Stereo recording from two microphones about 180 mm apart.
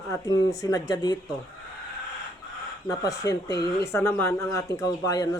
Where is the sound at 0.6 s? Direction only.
20° left (ahead or behind).